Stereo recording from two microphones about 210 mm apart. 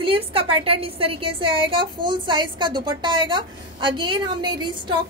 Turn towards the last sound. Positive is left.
turn(degrees=-20)  # may be behind; listen again after turning